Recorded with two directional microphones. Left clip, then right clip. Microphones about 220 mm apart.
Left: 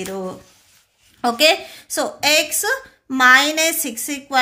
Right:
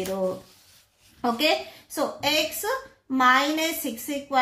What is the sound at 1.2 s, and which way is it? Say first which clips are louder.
A woman's voice: left 8 dB; 45° left (ahead or behind).